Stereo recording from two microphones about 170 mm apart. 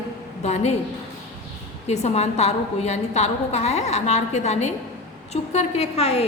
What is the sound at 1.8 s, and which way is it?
A woman's voice, 40° left (ahead or behind).